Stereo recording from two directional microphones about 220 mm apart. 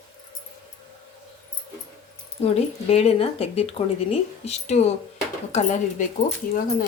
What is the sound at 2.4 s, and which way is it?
Speech, 30° left (ahead or behind).